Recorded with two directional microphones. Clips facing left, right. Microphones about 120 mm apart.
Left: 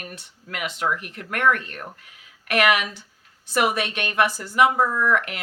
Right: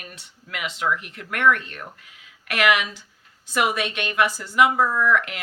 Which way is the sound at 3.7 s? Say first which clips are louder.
Even; 40° left (ahead or behind).